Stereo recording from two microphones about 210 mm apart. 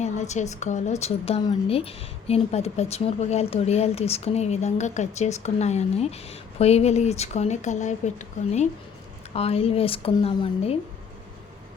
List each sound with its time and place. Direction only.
0.0 s a woman's voice: 35° left (ahead or behind)